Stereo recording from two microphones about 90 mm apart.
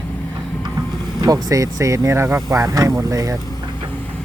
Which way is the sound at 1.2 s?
45° right (ahead or behind).